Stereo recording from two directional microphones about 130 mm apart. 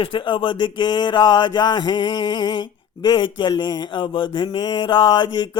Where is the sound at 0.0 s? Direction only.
40° left (ahead or behind).